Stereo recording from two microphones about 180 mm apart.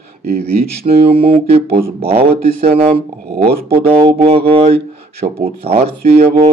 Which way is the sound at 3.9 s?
30° right (ahead or behind).